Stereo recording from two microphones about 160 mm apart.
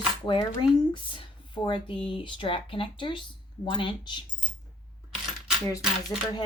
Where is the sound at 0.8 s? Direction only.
30° left (ahead or behind).